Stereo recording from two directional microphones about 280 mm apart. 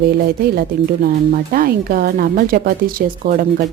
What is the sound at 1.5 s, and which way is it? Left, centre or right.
Speech, right.